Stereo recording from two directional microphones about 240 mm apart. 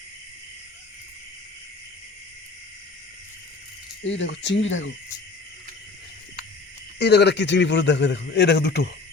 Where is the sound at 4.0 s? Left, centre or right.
Left.